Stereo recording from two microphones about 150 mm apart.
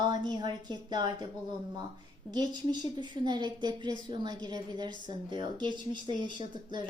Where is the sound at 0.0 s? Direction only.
30° right (ahead or behind).